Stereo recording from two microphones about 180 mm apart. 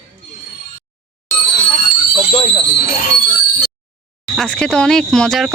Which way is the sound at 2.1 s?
25° left (ahead or behind).